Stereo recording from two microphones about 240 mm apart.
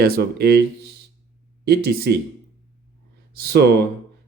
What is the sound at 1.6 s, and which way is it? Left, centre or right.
Speech, right.